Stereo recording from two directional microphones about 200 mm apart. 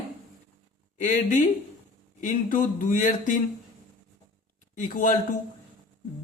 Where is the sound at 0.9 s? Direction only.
40° left (ahead or behind).